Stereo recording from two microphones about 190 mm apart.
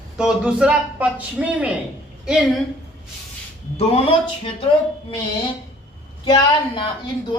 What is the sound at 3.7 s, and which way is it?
Speech, 30° left (ahead or behind).